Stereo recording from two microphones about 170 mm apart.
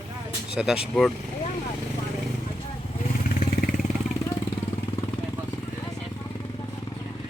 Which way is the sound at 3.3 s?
50° left (ahead or behind).